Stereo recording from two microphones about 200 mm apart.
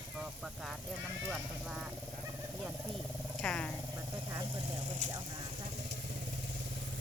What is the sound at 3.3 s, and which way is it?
Speech, 5° left (ahead or behind).